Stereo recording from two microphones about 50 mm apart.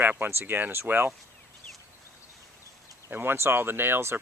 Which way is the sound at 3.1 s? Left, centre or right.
Right.